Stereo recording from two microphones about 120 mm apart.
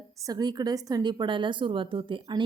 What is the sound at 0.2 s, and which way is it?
A woman's voice, 30° right (ahead or behind).